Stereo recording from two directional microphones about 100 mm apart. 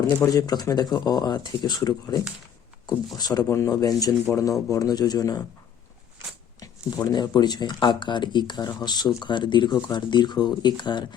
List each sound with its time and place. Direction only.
0.3 s speech: 40° left (ahead or behind)
6.6 s speech: 45° left (ahead or behind)